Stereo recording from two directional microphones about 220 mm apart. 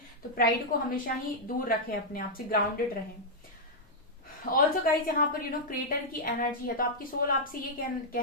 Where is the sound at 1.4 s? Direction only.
40° left (ahead or behind).